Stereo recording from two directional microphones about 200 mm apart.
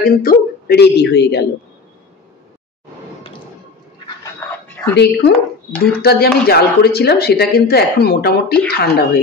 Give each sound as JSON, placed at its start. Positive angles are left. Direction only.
{"t": 0.0, "sound": "speech", "side_deg": 45}
{"t": 4.4, "sound": "dog", "side_deg": 15}
{"t": 4.9, "sound": "speech", "side_deg": 55}